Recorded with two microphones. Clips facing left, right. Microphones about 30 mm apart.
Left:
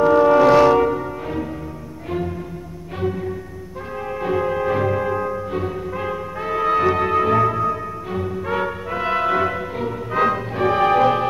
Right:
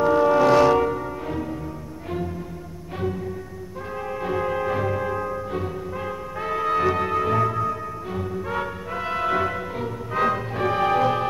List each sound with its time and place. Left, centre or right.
0.0 s music: centre
3.0 s music: centre